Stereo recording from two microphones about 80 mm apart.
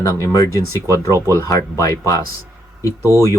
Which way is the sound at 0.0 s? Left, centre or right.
Left.